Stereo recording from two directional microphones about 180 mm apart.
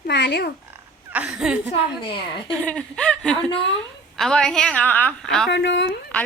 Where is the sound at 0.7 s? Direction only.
10° right (ahead or behind).